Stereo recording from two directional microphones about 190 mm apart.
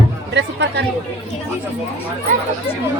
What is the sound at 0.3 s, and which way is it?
Speech, 65° right (ahead or behind).